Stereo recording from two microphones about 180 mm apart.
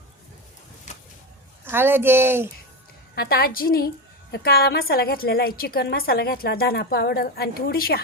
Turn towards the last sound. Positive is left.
turn(degrees=60)  # may be behind; listen again after turning